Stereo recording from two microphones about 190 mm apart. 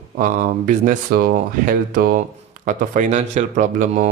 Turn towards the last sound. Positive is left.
turn(degrees=-40)  # may be behind; listen again after turning